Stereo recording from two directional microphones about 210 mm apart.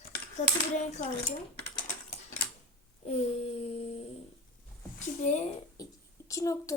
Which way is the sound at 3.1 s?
25° left (ahead or behind).